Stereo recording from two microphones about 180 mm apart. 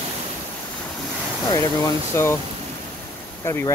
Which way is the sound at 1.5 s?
15° left (ahead or behind).